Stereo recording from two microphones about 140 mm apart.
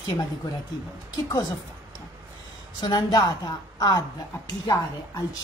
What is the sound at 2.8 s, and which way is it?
A woman's voice, 30° left (ahead or behind).